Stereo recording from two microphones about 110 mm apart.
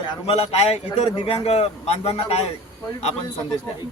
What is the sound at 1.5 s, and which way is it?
Speech, 65° left (ahead or behind).